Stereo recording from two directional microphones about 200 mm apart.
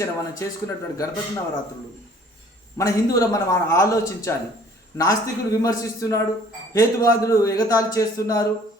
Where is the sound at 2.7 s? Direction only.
15° left (ahead or behind).